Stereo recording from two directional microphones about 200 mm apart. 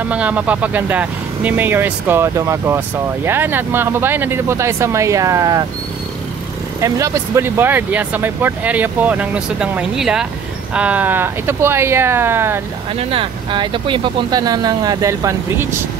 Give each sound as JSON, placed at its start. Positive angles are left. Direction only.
{"t": 0.1, "sound": "speech", "side_deg": -5}
{"t": 6.8, "sound": "speech", "side_deg": -15}
{"t": 12.9, "sound": "speech", "side_deg": -25}